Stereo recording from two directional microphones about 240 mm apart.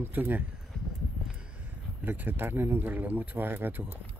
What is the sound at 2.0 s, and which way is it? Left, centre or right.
Speech, centre.